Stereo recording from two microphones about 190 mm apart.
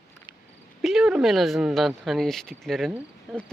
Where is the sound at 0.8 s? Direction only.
Centre (ahead or behind).